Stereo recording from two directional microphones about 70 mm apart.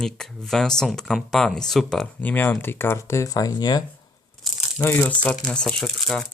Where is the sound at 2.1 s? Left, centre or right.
Left.